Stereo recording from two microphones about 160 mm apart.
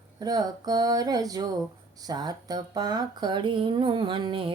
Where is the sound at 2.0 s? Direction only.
25° right (ahead or behind).